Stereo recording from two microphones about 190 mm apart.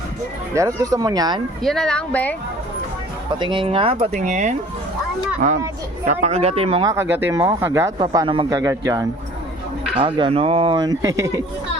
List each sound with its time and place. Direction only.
0.8 s speech: 20° right (ahead or behind)
1.6 s speech: 5° left (ahead or behind)
3.3 s speech: 25° right (ahead or behind); by 4.5 s 40° right (ahead or behind)
6.1 s speech: 35° right (ahead or behind)
6.8 s speech: 15° right (ahead or behind)